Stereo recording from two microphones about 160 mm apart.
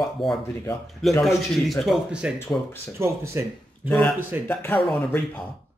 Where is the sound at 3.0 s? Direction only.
15° right (ahead or behind).